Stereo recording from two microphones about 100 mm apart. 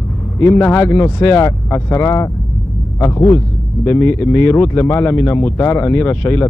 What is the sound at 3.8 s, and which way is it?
Speech, 20° left (ahead or behind).